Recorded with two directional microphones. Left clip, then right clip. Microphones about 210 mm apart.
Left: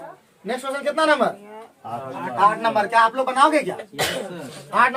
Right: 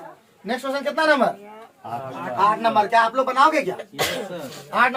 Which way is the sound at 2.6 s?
25° left (ahead or behind).